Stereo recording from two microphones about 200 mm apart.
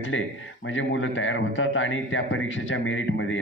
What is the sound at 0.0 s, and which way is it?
A man's voice, 75° left (ahead or behind).